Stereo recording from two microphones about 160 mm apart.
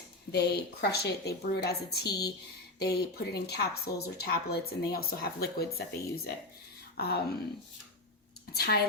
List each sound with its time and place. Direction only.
0.3 s a woman's voice: 90° left
8.5 s speech: 80° left